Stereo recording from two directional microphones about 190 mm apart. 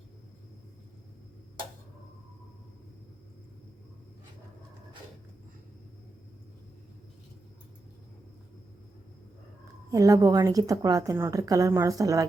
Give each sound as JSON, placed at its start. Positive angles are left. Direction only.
{"t": 9.9, "sound": "a woman's voice", "side_deg": -20}